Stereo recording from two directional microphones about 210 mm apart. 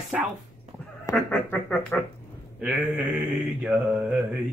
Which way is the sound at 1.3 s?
5° left (ahead or behind).